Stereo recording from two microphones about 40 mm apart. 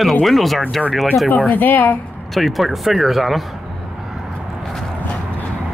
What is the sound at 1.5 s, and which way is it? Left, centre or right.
Speech, left.